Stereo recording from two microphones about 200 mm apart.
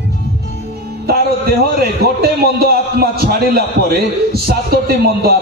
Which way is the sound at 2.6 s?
50° right (ahead or behind).